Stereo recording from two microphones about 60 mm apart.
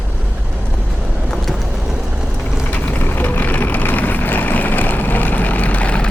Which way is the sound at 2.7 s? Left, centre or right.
Left.